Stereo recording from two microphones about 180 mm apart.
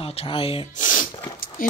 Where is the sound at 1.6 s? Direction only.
50° left (ahead or behind).